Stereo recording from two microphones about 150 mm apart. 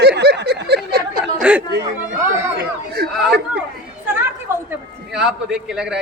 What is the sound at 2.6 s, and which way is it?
Chatter, 90° right.